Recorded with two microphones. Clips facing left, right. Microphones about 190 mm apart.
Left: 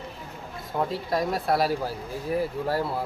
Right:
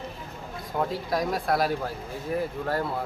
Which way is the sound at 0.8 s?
Centre (ahead or behind).